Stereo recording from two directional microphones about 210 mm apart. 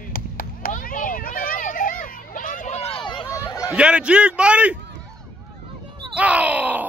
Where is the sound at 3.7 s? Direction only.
5° right (ahead or behind).